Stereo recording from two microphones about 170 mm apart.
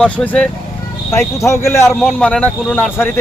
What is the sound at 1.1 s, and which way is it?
Speech, 15° left (ahead or behind).